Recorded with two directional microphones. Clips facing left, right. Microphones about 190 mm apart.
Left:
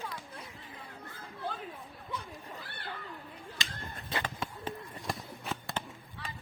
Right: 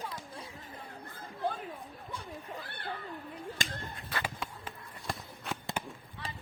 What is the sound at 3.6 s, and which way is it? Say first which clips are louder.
Chop: right 2 dB; 50° right (ahead or behind).